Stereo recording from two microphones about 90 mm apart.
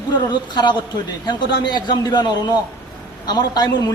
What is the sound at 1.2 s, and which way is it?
A man's voice, 55° left (ahead or behind).